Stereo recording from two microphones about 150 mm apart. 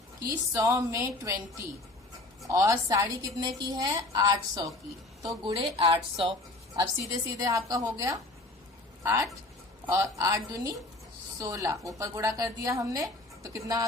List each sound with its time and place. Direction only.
0.2 s a woman's voice: 20° right (ahead or behind)
2.5 s a woman's voice: 20° right (ahead or behind)
5.5 s a woman's voice: 40° right (ahead or behind)
7.1 s a woman's voice: 25° right (ahead or behind)